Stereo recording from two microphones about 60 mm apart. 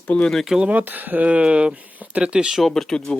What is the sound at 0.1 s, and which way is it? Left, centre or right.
Speech, left.